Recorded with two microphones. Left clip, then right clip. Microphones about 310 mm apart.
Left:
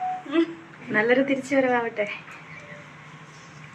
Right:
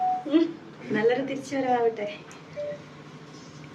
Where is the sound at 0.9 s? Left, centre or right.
Centre.